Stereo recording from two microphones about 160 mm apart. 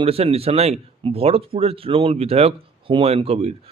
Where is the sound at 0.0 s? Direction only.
35° right (ahead or behind).